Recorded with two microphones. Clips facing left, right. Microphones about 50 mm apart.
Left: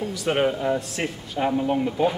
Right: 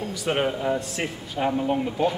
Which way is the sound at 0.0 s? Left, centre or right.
Centre.